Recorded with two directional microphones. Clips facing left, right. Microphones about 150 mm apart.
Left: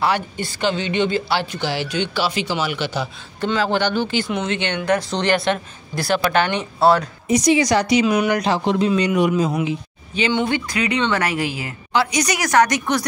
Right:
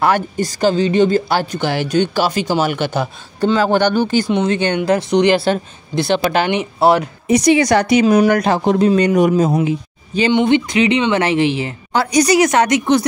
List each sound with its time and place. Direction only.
0.0 s a woman's voice: 45° right (ahead or behind)
4.7 s a woman's voice: 25° right (ahead or behind)
7.2 s a woman's voice: 65° right (ahead or behind); by 9.6 s 45° right (ahead or behind)
9.7 s a sound: 40° right (ahead or behind)
10.3 s a woman's voice: 20° right (ahead or behind)
11.9 s a woman's voice: 40° right (ahead or behind); by 13.0 s 25° right (ahead or behind)